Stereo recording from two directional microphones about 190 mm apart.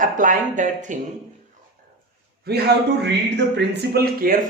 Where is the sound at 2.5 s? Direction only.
60° right (ahead or behind).